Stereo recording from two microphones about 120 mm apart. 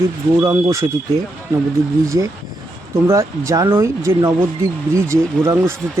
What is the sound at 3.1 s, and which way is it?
Speech, 25° right (ahead or behind).